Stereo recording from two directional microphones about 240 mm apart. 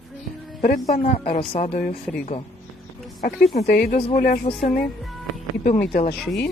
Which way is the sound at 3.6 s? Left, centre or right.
Left.